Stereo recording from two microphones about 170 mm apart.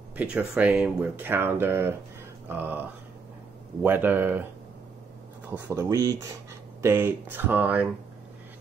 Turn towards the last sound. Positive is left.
turn(degrees=-10)  # may be behind; listen again after turning